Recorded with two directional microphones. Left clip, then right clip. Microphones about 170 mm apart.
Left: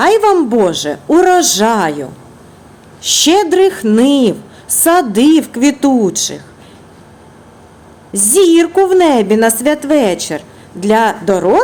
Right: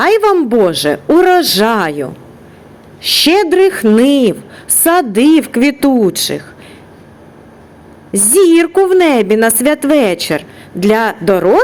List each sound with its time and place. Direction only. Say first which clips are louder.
0.0 s a woman's voice: even; 15° right (ahead or behind)
8.1 s a woman's voice: right 1 dB; 10° right (ahead or behind)